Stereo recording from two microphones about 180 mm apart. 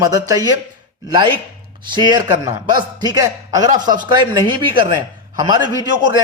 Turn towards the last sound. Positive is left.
turn(degrees=-20)  # may be behind; listen again after turning